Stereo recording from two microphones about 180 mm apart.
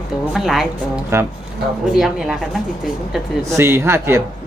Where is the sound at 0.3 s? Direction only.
Centre (ahead or behind).